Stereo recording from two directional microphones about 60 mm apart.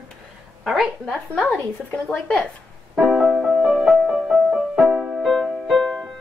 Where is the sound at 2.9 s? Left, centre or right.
Centre.